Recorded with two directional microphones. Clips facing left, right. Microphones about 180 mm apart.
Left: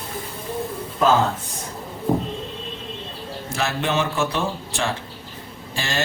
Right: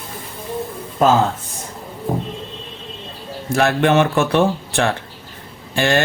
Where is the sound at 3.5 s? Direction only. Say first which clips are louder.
Right 9 dB; 60° right (ahead or behind).